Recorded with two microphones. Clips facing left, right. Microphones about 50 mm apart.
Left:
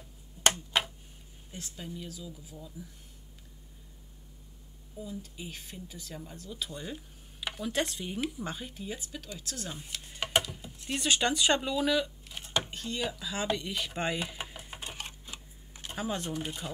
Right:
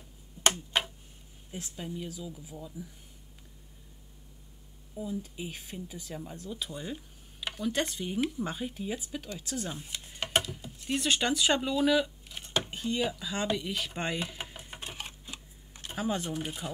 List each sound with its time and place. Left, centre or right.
1.5 s speech: centre
5.0 s speech: centre
9.8 s a sound: centre
10.4 s speech: centre
12.5 s a sound: centre
15.9 s speech: centre